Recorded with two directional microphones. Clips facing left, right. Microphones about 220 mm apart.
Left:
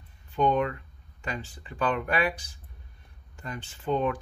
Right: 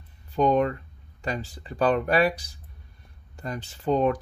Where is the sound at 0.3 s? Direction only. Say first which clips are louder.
Right 3 dB; 35° right (ahead or behind).